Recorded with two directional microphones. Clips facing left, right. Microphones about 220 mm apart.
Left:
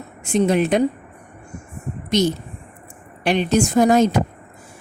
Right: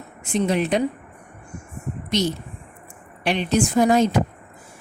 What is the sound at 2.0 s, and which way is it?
Speech, 45° left (ahead or behind).